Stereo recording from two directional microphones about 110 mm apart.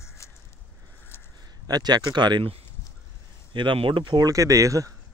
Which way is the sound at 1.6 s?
40° right (ahead or behind).